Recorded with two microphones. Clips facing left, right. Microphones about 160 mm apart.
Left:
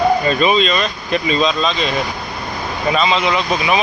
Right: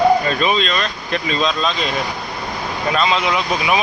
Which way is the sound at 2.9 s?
Centre (ahead or behind).